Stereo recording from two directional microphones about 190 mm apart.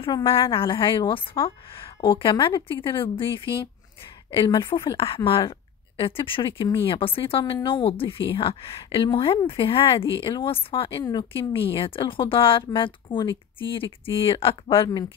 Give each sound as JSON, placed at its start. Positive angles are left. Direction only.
{"t": 0.0, "sound": "a woman's voice", "side_deg": 25}